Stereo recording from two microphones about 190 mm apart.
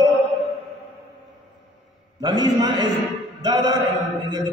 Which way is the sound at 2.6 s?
25° right (ahead or behind).